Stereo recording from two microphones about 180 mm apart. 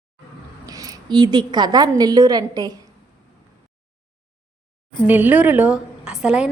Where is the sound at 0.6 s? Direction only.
20° right (ahead or behind).